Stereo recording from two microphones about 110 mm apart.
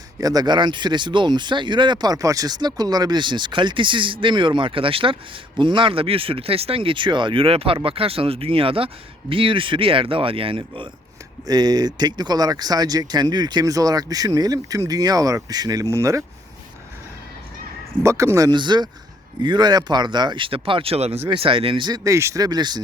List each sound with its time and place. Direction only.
0.2 s speech: 35° right (ahead or behind); by 10.8 s 55° right (ahead or behind)
11.4 s speech: 35° right (ahead or behind)
18.0 s speech: 25° right (ahead or behind)
18.5 s speech: 45° right (ahead or behind); by 21.2 s 70° right (ahead or behind)
21.2 s speech: 55° right (ahead or behind)
22.0 s speech: 25° right (ahead or behind)
22.4 s speech: 40° right (ahead or behind)